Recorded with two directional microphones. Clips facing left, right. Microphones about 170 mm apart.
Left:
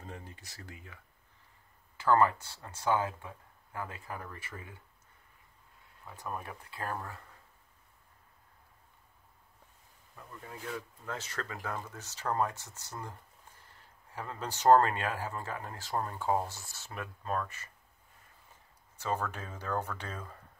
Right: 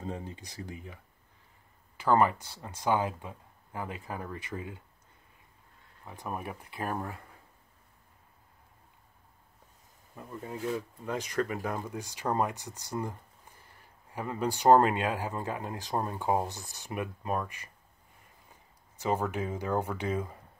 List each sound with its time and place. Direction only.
0.0 s speech: 20° right (ahead or behind)
2.0 s speech: 15° right (ahead or behind)
6.0 s speech: 15° right (ahead or behind)
10.1 s speech: 25° right (ahead or behind)